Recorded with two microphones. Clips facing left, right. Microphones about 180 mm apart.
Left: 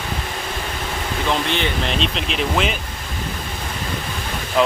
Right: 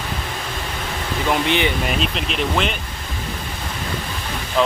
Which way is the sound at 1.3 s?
15° right (ahead or behind).